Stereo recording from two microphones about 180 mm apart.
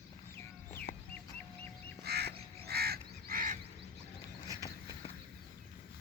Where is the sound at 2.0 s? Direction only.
65° right (ahead or behind).